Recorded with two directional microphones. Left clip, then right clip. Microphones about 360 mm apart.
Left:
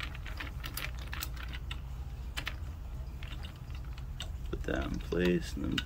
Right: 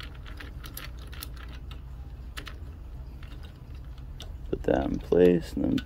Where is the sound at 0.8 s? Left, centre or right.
Centre.